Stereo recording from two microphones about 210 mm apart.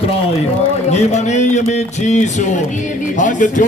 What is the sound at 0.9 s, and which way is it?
Speech, 30° left (ahead or behind).